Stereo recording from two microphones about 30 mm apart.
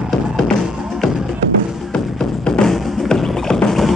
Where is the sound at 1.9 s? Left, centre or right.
Left.